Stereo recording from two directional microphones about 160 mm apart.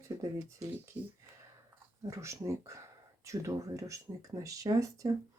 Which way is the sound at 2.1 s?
20° right (ahead or behind).